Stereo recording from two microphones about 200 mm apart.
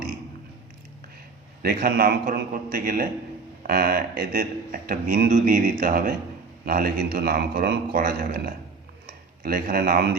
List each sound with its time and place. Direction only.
1.6 s a man's voice: 50° right (ahead or behind)